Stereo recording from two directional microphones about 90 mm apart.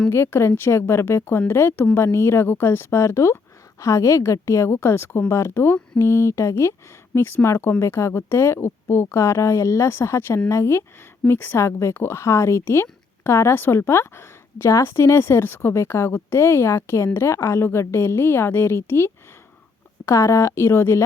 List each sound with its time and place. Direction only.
0.1 s a woman's voice: 30° left (ahead or behind)